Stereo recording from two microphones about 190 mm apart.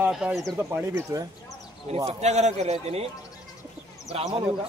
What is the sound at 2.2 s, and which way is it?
Speech, 35° right (ahead or behind).